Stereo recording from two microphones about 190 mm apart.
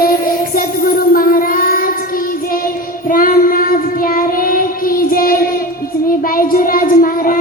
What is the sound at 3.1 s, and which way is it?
Child singing, 50° left (ahead or behind).